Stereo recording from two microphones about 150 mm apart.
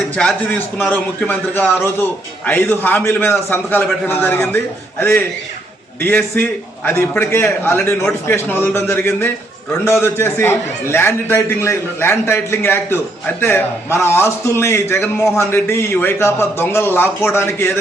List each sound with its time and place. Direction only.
0.8 s a man's voice: 15° left (ahead or behind)